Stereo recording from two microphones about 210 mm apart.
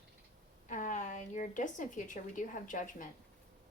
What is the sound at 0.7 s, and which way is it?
A woman's voice, 35° left (ahead or behind).